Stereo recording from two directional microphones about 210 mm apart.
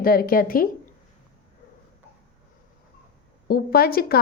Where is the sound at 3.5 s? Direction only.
45° left (ahead or behind).